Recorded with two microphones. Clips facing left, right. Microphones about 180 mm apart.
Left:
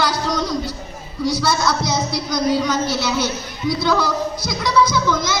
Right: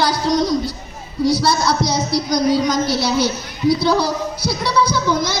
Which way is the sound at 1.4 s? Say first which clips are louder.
Right 2 dB; 35° right (ahead or behind).